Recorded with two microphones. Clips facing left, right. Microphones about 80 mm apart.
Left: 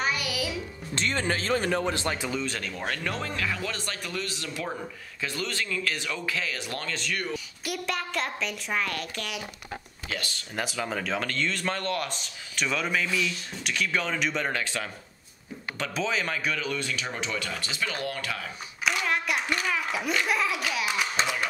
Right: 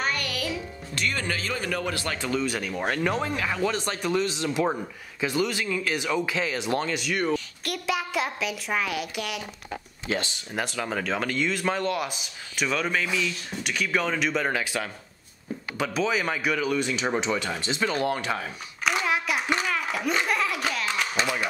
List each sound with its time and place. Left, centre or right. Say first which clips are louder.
0.0 s music: even; centre
0.9 s speech: left 1 dB; left
2.4 s speech: right 4 dB; centre
7.3 s speech: right 3 dB; centre
10.0 s speech: right 6 dB; right
10.5 s speech: right 2 dB; centre; by 18.5 s right
19.0 s a sound: right 2 dB; centre
19.7 s belly laugh: right 2 dB; centre
20.2 s a sound: right 1 dB; centre